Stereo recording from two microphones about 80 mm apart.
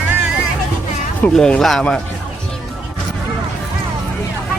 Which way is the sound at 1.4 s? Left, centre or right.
Centre.